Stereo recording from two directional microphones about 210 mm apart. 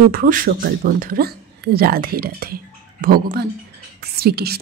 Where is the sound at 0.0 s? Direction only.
45° right (ahead or behind).